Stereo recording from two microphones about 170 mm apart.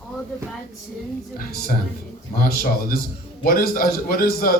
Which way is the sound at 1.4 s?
60° left (ahead or behind).